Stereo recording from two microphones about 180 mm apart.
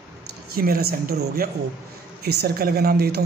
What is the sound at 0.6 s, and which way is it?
A man's voice, 55° right (ahead or behind).